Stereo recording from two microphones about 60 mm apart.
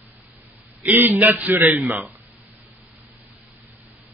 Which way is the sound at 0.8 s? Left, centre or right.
Right.